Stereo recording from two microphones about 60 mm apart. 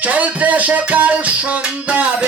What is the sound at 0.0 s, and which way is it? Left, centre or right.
Music, right.